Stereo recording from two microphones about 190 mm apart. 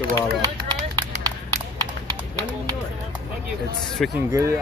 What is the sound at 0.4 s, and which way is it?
Run, 20° right (ahead or behind).